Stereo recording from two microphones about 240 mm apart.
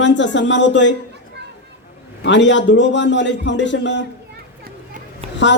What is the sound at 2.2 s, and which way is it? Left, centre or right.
Speech, left.